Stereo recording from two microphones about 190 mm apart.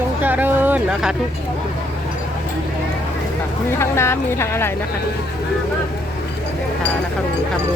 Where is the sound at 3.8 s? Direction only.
15° left (ahead or behind).